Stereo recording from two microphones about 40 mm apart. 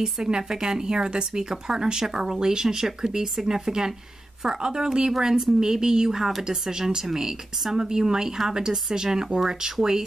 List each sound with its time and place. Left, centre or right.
0.0 s speech: centre